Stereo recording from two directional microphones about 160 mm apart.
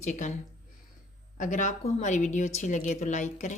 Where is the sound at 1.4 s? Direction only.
50° left (ahead or behind).